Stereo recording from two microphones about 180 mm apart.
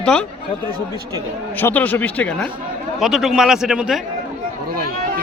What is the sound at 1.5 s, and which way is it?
A man's voice, 10° left (ahead or behind).